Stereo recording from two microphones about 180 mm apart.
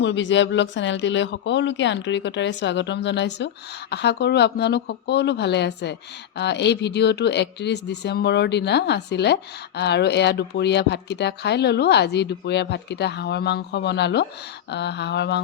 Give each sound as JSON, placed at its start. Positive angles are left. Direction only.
{"t": 0.0, "sound": "speech", "side_deg": 85}